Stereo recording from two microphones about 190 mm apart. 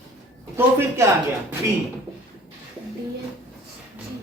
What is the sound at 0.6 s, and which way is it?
Speech, 15° right (ahead or behind).